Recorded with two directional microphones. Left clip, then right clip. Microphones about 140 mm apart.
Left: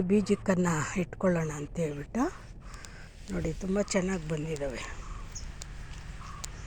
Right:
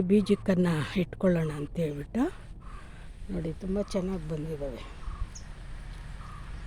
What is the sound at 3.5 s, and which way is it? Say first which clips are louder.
Speech: left 3 dB; 15° left (ahead or behind).